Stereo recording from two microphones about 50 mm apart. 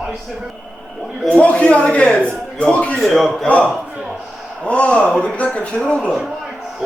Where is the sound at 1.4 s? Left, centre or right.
Left.